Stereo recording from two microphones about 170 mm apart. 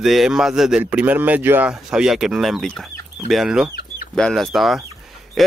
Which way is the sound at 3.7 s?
70° left (ahead or behind).